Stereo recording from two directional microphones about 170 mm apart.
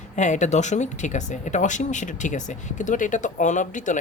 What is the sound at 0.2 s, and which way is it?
Speech, 45° left (ahead or behind).